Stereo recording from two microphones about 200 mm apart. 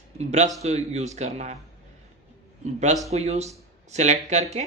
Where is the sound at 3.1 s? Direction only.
35° right (ahead or behind).